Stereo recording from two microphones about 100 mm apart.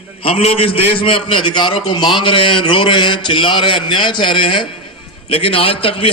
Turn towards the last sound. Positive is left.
turn(degrees=65)  # may be behind; listen again after turning